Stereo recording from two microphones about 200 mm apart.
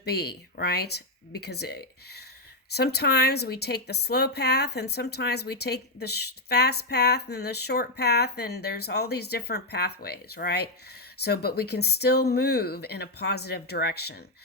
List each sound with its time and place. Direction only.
0.0 s a woman's voice: 55° left (ahead or behind)